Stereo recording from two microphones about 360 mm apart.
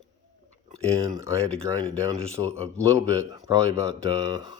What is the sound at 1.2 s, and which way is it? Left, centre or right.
Speech, centre.